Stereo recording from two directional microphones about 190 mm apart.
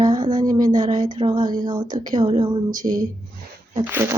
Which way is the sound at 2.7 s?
45° right (ahead or behind).